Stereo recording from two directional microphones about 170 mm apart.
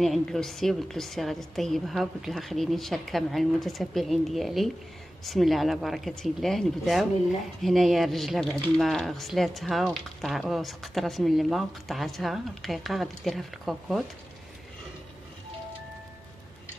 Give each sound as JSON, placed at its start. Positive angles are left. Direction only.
{"t": 0.0, "sound": "speech", "side_deg": 0}